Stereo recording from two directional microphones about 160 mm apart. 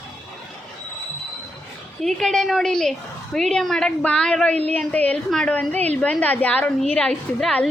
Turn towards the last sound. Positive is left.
turn(degrees=5)  # may be behind; listen again after turning